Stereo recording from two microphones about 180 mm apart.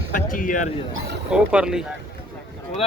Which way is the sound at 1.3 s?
5° right (ahead or behind).